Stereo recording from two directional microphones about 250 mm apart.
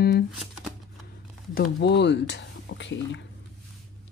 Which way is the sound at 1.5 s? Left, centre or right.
Left.